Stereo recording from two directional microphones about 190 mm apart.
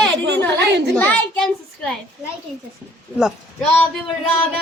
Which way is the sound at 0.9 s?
5° left (ahead or behind).